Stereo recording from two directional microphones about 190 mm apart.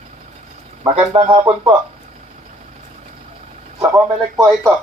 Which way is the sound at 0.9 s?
30° right (ahead or behind).